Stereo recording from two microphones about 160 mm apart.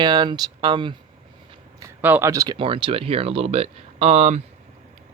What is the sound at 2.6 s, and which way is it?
Speech, 35° right (ahead or behind).